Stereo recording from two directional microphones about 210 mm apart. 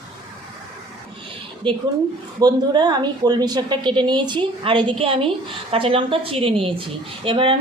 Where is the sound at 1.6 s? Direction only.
25° right (ahead or behind).